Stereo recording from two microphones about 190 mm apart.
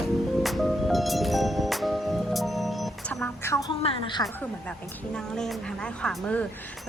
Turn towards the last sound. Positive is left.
turn(degrees=5)  # may be behind; listen again after turning